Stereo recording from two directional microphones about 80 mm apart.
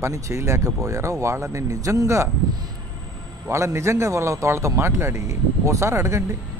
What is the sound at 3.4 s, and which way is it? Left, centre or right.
Speech, right.